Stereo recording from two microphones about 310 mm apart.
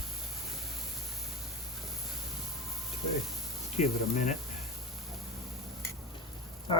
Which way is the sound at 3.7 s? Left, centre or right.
Left.